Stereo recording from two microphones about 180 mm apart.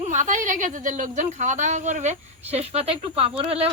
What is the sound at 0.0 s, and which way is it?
A woman's voice, 45° right (ahead or behind).